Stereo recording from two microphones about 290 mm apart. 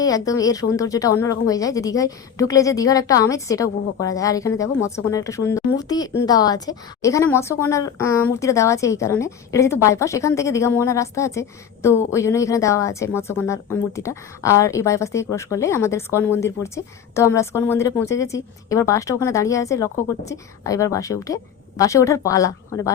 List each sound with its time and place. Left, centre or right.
0.0 s a woman's voice: centre